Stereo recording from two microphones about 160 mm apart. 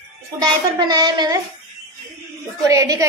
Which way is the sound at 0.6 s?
25° right (ahead or behind).